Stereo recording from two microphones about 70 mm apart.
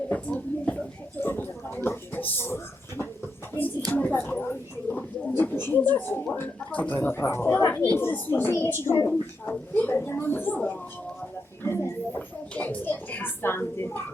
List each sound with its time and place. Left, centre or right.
0.1 s speech: centre
1.2 s speech: left
3.9 s a woman's voice: left
7.9 s speech: left
11.6 s speech: left
12.5 s speech: left